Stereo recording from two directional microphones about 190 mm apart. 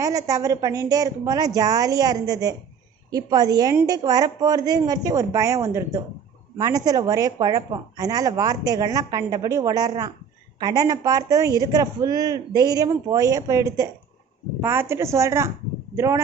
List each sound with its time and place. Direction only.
0.0 s a woman's voice: 15° right (ahead or behind)